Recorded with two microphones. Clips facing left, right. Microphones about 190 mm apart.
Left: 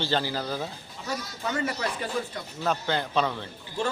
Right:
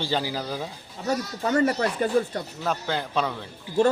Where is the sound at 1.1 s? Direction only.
40° right (ahead or behind).